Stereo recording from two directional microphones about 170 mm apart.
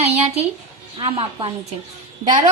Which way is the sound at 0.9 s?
30° right (ahead or behind).